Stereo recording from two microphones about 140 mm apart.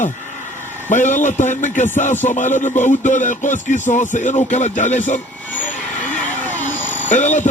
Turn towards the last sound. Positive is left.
turn(degrees=60)  # may be behind; listen again after turning